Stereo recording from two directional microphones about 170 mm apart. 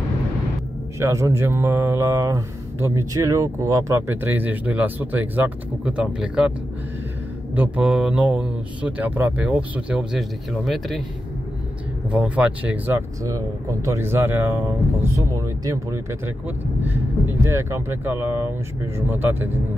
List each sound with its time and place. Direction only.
0.9 s speech: 15° right (ahead or behind)
7.5 s speech: 10° right (ahead or behind)
12.1 s speech: 5° right (ahead or behind)